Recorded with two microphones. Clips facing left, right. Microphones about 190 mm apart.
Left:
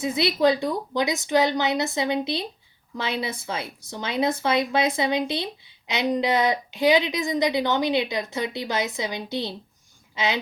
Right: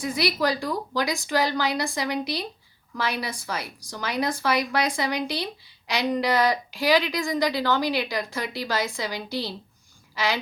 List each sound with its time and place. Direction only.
0.0 s speech: 25° left (ahead or behind)